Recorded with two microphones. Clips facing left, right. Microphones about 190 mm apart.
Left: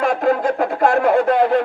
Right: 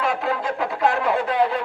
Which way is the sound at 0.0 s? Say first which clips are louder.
Left 7 dB; 45° left (ahead or behind).